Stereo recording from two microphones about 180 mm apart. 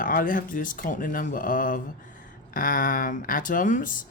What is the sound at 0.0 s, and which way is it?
Speech, 50° left (ahead or behind).